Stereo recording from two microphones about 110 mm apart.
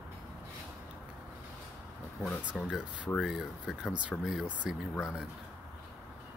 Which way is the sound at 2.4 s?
10° right (ahead or behind).